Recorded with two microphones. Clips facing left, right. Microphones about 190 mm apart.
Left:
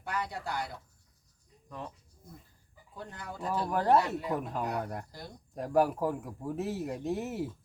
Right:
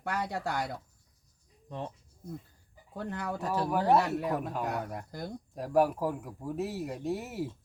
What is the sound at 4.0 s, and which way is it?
Speech, 65° right (ahead or behind).